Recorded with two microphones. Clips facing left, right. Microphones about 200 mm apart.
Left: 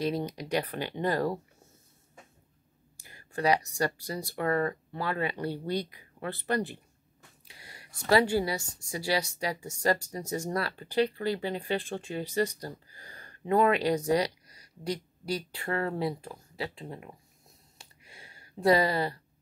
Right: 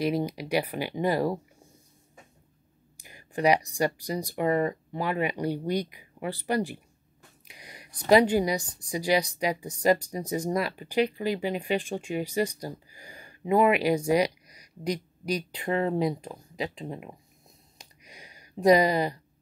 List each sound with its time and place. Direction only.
0.0 s a woman's voice: 10° right (ahead or behind)
3.0 s a woman's voice: 15° right (ahead or behind)
17.7 s a sound: 15° right (ahead or behind)